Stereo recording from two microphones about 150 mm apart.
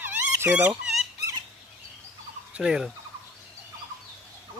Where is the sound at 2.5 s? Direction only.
5° right (ahead or behind).